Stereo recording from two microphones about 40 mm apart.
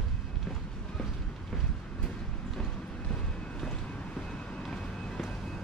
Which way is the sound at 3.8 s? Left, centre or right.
Left.